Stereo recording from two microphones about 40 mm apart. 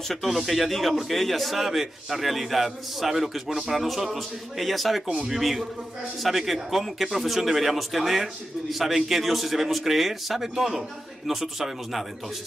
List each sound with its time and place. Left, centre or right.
0.1 s speech: centre
5.0 s speech: right
5.3 s speech: centre